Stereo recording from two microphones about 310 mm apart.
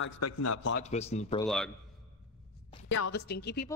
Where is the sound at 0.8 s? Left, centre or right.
Left.